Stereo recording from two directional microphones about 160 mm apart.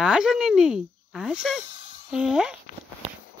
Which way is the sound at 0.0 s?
5° right (ahead or behind).